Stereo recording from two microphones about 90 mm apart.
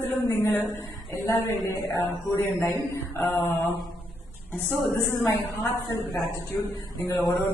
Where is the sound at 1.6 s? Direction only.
25° left (ahead or behind).